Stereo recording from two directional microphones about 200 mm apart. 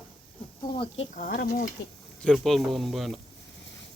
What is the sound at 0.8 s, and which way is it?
Speech, 35° left (ahead or behind).